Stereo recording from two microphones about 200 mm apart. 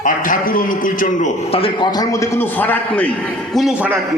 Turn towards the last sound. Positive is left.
turn(degrees=-5)  # may be behind; listen again after turning